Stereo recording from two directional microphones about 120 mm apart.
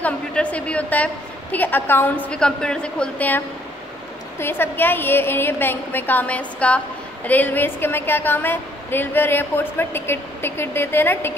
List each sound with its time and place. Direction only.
0.0 s a woman's voice: 10° left (ahead or behind)